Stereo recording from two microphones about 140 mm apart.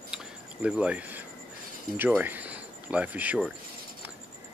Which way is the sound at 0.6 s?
10° right (ahead or behind).